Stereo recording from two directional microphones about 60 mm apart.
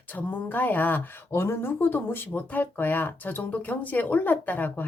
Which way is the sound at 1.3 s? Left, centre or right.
Left.